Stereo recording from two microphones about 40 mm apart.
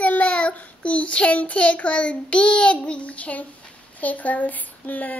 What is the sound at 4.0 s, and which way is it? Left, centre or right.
A child's voice, left.